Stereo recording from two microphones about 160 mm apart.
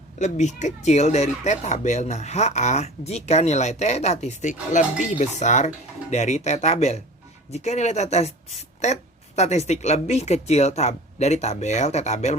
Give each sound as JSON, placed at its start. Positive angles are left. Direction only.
{"t": 0.2, "sound": "speech", "side_deg": 45}